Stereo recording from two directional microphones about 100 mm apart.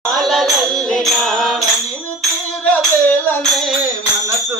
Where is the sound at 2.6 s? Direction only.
20° left (ahead or behind).